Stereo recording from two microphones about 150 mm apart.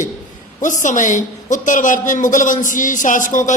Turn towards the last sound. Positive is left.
turn(degrees=60)  # may be behind; listen again after turning